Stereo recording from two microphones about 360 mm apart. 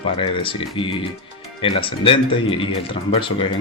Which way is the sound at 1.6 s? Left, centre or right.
Centre.